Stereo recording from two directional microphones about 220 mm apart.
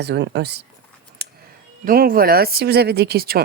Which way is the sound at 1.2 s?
45° right (ahead or behind).